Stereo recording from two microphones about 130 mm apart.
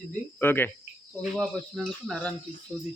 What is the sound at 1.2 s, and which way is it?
Speech, centre (ahead or behind).